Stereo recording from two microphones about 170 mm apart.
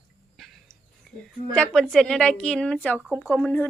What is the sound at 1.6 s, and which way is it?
A woman's voice, 5° left (ahead or behind).